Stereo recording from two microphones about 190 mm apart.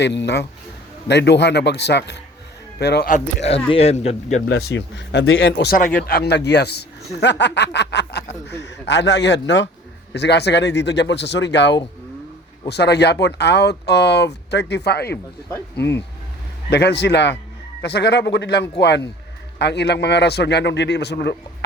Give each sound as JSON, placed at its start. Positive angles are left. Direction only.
{"t": 0.0, "sound": "speech", "side_deg": 65}
{"t": 3.1, "sound": "a man's voice", "side_deg": 35}
{"t": 4.4, "sound": "speech", "side_deg": 60}